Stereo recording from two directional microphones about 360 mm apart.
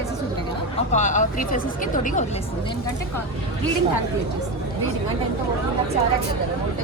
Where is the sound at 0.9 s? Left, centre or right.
Centre.